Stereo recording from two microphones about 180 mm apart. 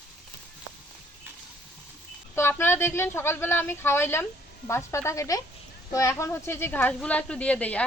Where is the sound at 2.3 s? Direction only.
15° left (ahead or behind).